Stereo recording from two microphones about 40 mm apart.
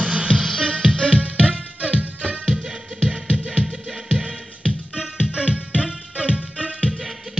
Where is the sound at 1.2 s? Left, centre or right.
Right.